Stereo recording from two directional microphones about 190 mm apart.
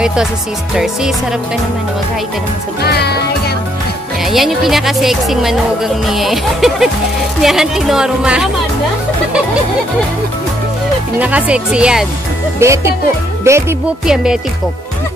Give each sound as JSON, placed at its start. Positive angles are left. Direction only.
{"t": 0.0, "sound": "speech", "side_deg": -5}
{"t": 2.8, "sound": "music", "side_deg": 60}
{"t": 4.2, "sound": "speech", "side_deg": 0}
{"t": 11.1, "sound": "speech", "side_deg": -5}
{"t": 12.5, "sound": "speech", "side_deg": -15}